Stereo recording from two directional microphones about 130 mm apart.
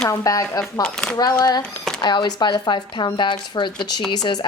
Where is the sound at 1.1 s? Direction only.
30° left (ahead or behind).